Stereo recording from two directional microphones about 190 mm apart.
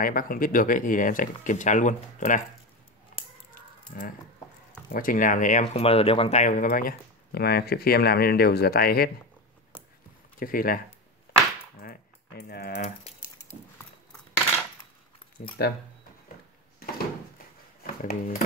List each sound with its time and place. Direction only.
0.0 s speech: 50° left (ahead or behind)
3.9 s speech: 50° left (ahead or behind)
10.4 s speech: 50° left (ahead or behind)
11.8 s typing: 55° left (ahead or behind)
15.6 s speech: 60° left (ahead or behind)
17.8 s a sound: 50° left (ahead or behind)